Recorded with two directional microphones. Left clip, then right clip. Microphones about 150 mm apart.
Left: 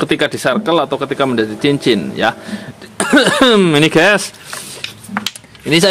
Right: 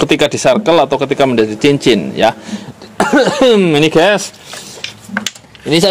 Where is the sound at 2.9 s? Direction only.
15° left (ahead or behind).